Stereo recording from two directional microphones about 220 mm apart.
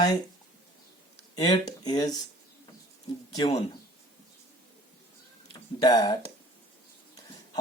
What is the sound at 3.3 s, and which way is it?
Speech, 20° left (ahead or behind).